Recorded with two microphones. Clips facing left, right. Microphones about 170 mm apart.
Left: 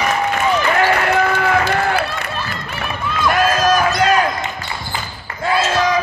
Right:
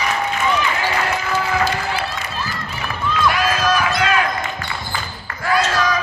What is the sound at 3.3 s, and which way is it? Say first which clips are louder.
Basketball bounce: left 5 dB; 45° left (ahead or behind).